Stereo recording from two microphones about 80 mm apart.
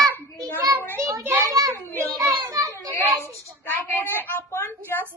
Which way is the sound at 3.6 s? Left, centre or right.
Left.